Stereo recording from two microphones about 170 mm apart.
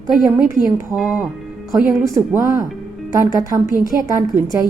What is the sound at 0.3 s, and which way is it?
A woman's voice, 15° right (ahead or behind).